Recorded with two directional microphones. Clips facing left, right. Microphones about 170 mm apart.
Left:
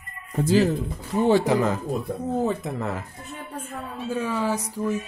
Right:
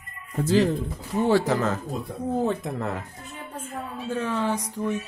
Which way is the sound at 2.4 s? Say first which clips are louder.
Right 1 dB; centre (ahead or behind).